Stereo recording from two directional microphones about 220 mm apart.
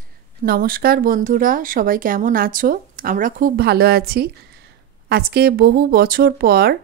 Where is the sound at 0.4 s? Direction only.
40° right (ahead or behind).